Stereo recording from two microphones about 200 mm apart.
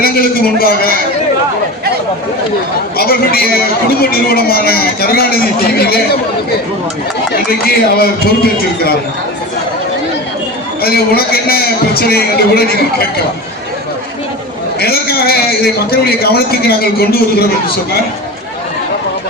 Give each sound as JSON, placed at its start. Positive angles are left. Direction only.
{"t": 0.0, "sound": "a man's voice", "side_deg": 50}
{"t": 3.0, "sound": "a man's voice", "side_deg": 50}
{"t": 7.3, "sound": "a man's voice", "side_deg": 50}
{"t": 10.8, "sound": "a man's voice", "side_deg": 50}
{"t": 14.8, "sound": "a man's voice", "side_deg": 50}